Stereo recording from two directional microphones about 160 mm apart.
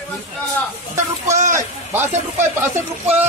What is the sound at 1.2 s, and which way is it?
Speech, 50° right (ahead or behind).